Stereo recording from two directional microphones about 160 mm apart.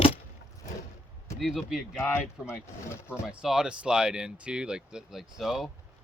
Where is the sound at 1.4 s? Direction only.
Centre (ahead or behind).